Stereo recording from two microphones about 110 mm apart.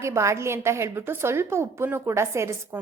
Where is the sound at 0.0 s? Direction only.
25° right (ahead or behind).